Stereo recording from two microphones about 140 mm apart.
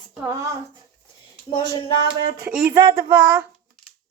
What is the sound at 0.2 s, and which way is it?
Speech, 20° right (ahead or behind).